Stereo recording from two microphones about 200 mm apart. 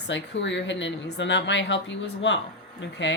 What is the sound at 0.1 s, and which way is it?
A woman's voice, 65° left (ahead or behind).